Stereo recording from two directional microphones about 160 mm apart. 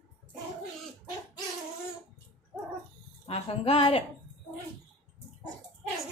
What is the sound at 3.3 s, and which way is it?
Speech, 35° left (ahead or behind).